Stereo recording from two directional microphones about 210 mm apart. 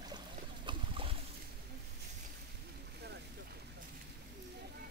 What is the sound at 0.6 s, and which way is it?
Boat, 25° right (ahead or behind).